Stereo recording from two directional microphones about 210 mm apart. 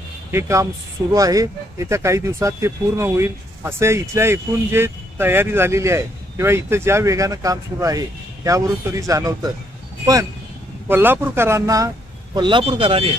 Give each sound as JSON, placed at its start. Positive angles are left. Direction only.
{"t": 0.3, "sound": "speech", "side_deg": -15}
{"t": 10.9, "sound": "speech", "side_deg": -10}